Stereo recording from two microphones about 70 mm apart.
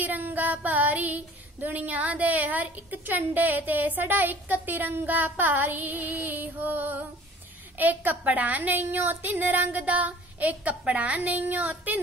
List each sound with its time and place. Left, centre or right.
0.0 s child singing: right
1.6 s a woman's voice: right
6.5 s music: right
7.7 s a woman's voice: right